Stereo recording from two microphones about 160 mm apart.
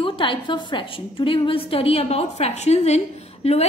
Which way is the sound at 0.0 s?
30° left (ahead or behind).